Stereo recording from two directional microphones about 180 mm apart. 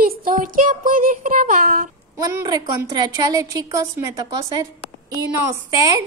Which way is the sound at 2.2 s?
20° right (ahead or behind).